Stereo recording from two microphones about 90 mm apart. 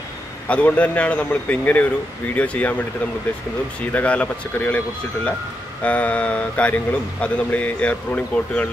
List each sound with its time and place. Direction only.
0.5 s speech: 15° left (ahead or behind)
3.9 s speech: 15° left (ahead or behind)